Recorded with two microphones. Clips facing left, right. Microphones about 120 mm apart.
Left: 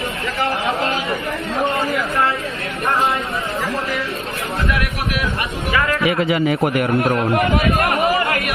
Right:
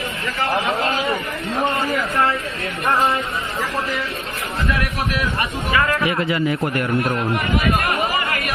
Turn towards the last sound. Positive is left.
turn(degrees=65)  # may be behind; listen again after turning